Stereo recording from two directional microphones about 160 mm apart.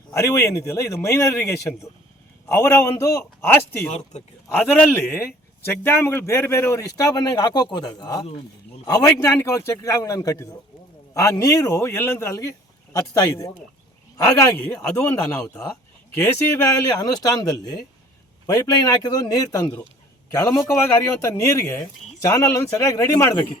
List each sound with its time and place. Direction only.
0.1 s speech: 20° left (ahead or behind)